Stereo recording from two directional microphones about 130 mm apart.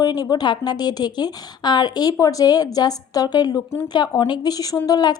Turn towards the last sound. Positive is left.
turn(degrees=30)  # may be behind; listen again after turning